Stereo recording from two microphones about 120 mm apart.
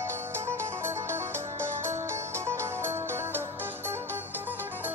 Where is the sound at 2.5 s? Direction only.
20° right (ahead or behind).